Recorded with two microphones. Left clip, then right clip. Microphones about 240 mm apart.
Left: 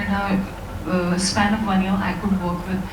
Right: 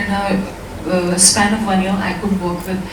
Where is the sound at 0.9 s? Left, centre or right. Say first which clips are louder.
Right 7 dB; centre.